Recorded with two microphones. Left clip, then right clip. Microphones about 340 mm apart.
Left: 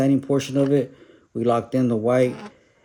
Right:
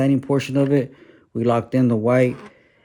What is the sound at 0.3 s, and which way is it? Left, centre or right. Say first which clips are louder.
Speech: right 1 dB; right.